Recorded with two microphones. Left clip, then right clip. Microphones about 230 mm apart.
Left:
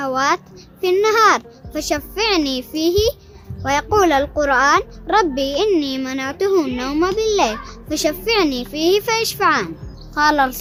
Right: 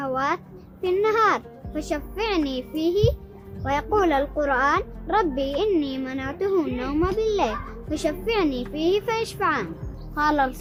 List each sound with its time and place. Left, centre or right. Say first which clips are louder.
0.0 s a child's voice: left 7 dB; left